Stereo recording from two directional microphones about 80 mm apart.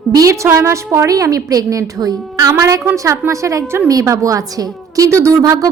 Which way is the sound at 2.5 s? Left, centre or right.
Right.